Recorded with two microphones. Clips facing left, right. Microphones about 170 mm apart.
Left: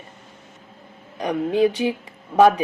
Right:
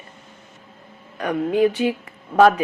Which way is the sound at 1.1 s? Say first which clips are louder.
Right 1 dB; 15° left (ahead or behind).